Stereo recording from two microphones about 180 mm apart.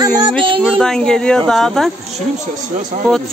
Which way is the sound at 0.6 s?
Centre (ahead or behind).